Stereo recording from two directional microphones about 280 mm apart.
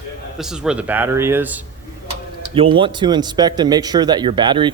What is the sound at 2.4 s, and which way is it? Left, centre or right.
Speech, centre.